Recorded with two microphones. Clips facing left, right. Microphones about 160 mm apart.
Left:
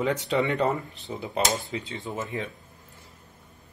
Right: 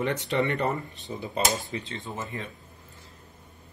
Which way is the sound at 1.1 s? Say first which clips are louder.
Left 1 dB; 15° left (ahead or behind).